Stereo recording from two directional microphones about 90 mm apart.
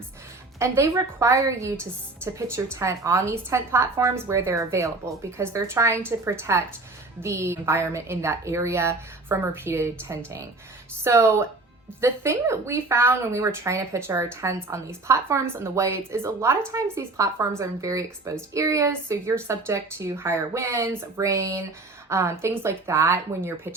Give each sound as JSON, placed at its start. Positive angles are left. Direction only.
{"t": 0.6, "sound": "a woman's voice", "side_deg": -30}